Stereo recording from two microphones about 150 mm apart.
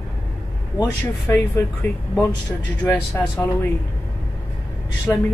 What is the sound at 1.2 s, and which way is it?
Speech, 15° left (ahead or behind).